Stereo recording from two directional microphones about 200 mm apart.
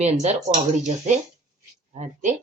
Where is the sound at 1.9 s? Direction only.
35° right (ahead or behind).